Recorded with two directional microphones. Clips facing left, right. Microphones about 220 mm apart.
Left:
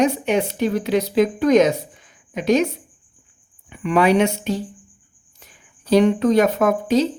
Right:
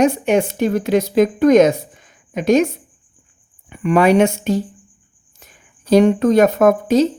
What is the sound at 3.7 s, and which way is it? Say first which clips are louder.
Speech: right 3 dB; 50° right (ahead or behind).